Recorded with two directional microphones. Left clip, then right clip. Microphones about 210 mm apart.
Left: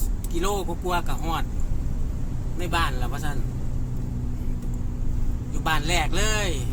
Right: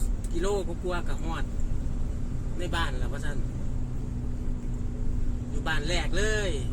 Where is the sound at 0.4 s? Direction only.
30° left (ahead or behind).